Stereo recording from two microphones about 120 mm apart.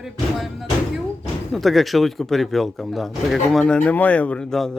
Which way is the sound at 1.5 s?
Centre (ahead or behind).